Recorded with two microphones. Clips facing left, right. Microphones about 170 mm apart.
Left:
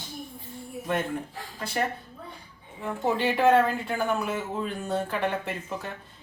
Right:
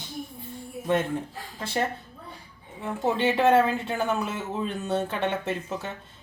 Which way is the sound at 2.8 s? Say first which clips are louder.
Right 1 dB; 20° right (ahead or behind).